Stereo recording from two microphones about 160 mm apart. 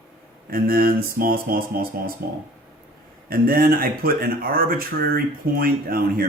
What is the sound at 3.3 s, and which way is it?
Speech, 65° right (ahead or behind).